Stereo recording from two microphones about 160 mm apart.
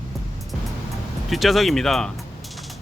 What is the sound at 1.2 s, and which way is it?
Speech, centre (ahead or behind).